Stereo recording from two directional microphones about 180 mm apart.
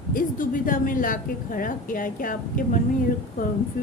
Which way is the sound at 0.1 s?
50° left (ahead or behind).